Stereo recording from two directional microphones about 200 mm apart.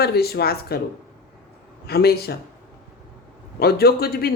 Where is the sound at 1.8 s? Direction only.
50° left (ahead or behind).